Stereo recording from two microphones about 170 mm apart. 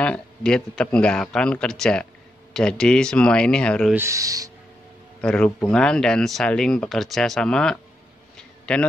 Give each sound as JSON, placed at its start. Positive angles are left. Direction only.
{"t": 0.0, "sound": "speech", "side_deg": 5}
{"t": 3.9, "sound": "speech", "side_deg": -15}
{"t": 5.2, "sound": "speech", "side_deg": 5}
{"t": 8.4, "sound": "a sound", "side_deg": 5}